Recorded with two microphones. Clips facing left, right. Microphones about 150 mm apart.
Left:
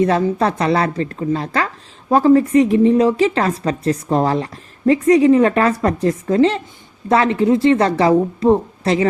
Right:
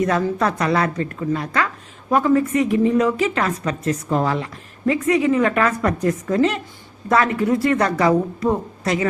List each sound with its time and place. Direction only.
0.0 s a woman's voice: 30° left (ahead or behind)